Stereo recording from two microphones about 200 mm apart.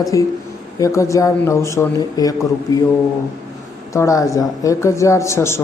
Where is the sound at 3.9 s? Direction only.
15° left (ahead or behind).